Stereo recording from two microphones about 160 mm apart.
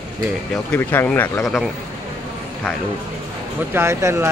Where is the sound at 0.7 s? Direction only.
10° left (ahead or behind).